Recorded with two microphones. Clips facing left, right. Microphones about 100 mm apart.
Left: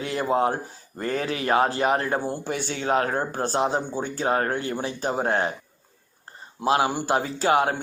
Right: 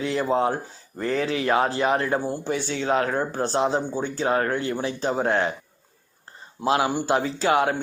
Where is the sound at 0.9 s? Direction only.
45° left (ahead or behind).